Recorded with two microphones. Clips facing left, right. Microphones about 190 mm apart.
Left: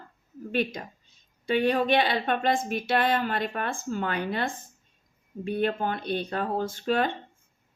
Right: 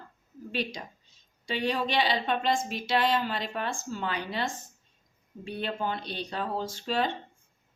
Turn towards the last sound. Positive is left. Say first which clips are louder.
# left 4 dB
turn(degrees=55)  # may be behind; listen again after turning